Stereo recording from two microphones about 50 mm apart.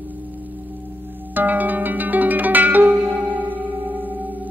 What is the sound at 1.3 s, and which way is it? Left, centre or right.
Zither, right.